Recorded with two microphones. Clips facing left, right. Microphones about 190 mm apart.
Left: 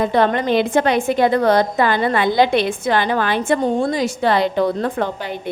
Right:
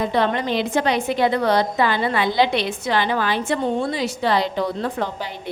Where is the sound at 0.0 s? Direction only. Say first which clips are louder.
Left 4 dB; 50° left (ahead or behind).